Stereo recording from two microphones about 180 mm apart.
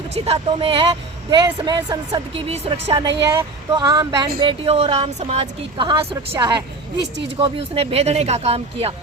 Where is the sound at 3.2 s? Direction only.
15° right (ahead or behind); by 5.8 s 35° right (ahead or behind).